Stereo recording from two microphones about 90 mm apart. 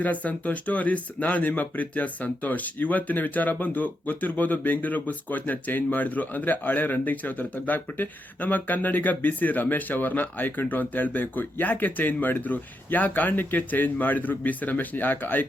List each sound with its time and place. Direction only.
0.0 s speech: 15° left (ahead or behind)